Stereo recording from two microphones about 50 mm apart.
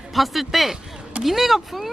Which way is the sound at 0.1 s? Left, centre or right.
Centre.